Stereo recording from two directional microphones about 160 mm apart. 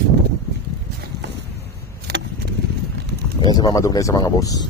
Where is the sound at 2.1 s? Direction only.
90° right.